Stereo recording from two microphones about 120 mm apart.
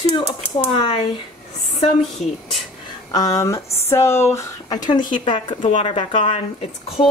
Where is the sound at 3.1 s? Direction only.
30° left (ahead or behind).